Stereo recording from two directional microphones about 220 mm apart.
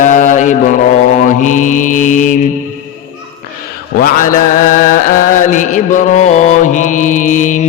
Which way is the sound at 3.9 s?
40° left (ahead or behind).